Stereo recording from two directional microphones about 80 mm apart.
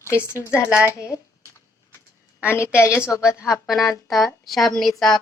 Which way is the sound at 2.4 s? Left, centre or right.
Left.